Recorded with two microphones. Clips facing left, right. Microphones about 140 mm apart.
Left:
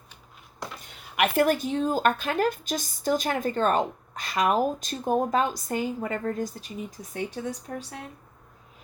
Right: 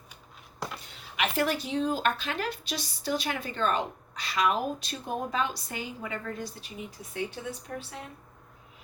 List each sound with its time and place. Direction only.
0.9 s speech: 55° left (ahead or behind)
7.7 s a woman's voice: 30° left (ahead or behind)